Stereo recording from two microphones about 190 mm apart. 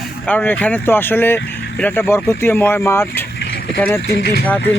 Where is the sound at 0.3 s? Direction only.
10° left (ahead or behind).